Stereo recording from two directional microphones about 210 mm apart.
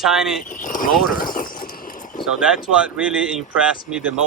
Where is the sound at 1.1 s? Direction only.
40° left (ahead or behind).